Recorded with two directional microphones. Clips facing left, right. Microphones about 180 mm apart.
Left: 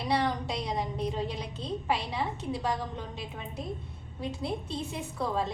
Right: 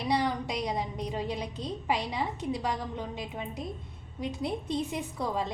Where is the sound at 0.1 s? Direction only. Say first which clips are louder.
Even; 15° right (ahead or behind).